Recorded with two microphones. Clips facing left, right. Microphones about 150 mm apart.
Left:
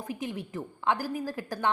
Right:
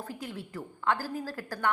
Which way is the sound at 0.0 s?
15° left (ahead or behind).